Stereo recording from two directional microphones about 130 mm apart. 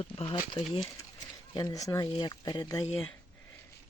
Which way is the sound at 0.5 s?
35° left (ahead or behind).